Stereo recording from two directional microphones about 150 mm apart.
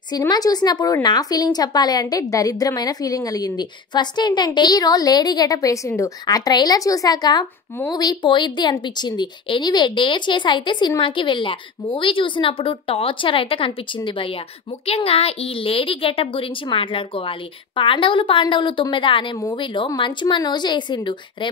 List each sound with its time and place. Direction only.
0.3 s a woman's voice: 25° left (ahead or behind)